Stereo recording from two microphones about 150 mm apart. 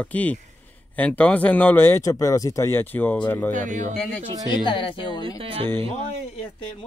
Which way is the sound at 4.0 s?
5° left (ahead or behind).